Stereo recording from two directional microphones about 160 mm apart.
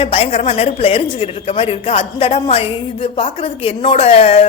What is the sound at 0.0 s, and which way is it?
A woman's voice, 35° left (ahead or behind).